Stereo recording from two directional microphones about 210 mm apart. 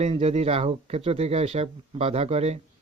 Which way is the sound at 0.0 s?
30° right (ahead or behind).